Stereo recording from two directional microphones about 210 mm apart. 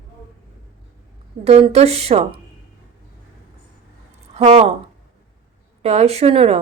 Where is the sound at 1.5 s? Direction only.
30° right (ahead or behind).